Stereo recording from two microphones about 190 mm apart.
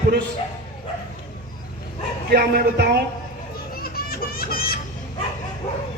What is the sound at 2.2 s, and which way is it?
Speech, 55° right (ahead or behind).